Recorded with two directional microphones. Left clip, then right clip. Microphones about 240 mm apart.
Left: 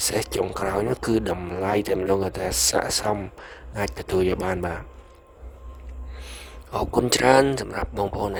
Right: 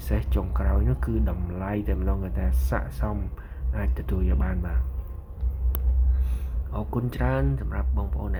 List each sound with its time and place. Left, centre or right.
0.0 s speech: left
6.2 s speech: left